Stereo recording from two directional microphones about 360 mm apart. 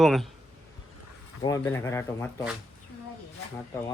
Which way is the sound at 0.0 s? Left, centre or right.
Centre.